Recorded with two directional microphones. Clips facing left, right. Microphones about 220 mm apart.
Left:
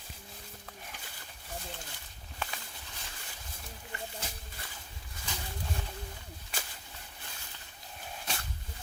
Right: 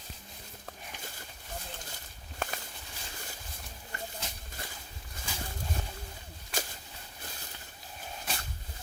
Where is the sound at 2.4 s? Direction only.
45° right (ahead or behind).